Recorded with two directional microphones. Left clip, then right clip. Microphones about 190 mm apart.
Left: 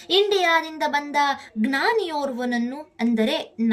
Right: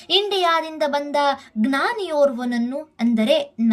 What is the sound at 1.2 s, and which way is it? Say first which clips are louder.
A woman's voice: right 2 dB; 40° right (ahead or behind).